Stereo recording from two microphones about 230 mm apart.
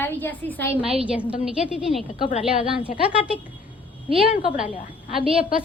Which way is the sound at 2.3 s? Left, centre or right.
Left.